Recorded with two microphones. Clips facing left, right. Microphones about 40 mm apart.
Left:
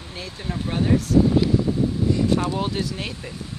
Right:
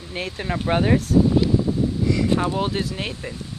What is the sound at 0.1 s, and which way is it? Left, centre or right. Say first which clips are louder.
Speech: right 5 dB; right.